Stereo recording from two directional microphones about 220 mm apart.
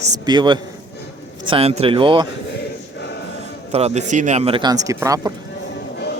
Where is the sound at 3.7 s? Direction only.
30° right (ahead or behind).